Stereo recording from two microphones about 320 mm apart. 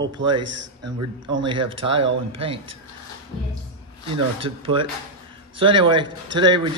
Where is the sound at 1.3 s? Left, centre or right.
Centre.